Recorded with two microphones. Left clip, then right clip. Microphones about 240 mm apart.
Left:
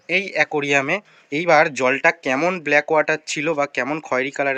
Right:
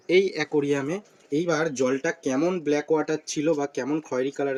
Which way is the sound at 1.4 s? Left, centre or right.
Centre.